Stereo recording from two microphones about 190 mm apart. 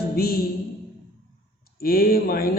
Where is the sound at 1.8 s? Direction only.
50° left (ahead or behind).